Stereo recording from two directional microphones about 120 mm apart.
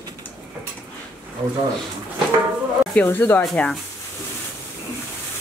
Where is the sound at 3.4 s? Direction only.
5° left (ahead or behind).